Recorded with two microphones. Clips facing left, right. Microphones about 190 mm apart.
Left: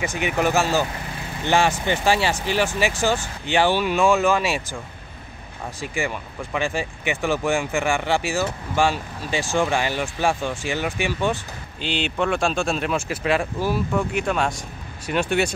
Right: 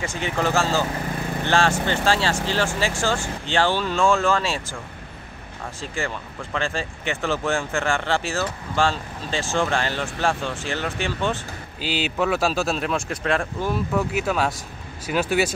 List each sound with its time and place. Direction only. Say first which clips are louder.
0.0 s speech: left 2 dB; 15° left (ahead or behind)
5.8 s speech: left 2 dB; 15° left (ahead or behind)
11.8 s speech: even; 5° right (ahead or behind)